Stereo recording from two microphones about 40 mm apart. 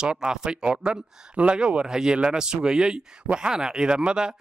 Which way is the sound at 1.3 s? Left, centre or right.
Right.